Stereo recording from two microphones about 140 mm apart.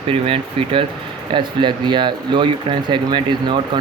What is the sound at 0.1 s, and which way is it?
Speech, 40° right (ahead or behind).